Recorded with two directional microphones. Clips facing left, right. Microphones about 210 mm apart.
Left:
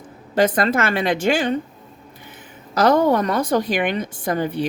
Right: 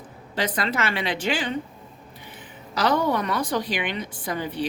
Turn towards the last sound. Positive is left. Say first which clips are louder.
# left 6 dB
turn(degrees=50)  # may be behind; listen again after turning